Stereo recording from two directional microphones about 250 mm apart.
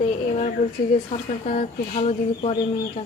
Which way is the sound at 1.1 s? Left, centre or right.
Left.